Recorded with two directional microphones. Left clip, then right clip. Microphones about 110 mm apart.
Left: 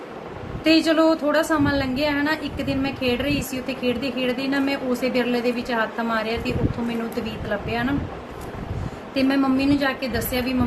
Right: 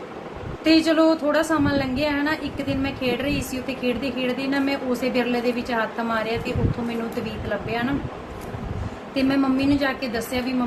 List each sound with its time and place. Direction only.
0.6 s a woman's voice: 10° left (ahead or behind)
7.7 s a woman's voice: 5° left (ahead or behind)
9.1 s a woman's voice: 10° left (ahead or behind)